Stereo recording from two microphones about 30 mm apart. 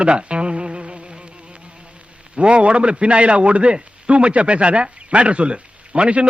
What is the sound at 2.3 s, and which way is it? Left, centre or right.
A man's voice, right.